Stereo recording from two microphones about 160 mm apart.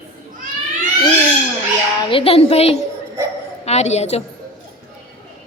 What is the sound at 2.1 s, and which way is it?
A woman's voice, 35° left (ahead or behind).